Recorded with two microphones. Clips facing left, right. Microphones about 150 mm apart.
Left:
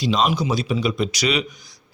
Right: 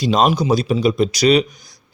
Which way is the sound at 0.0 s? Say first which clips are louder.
Right 4 dB; 45° right (ahead or behind).